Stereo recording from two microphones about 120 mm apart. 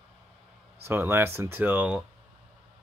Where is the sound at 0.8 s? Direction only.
20° right (ahead or behind).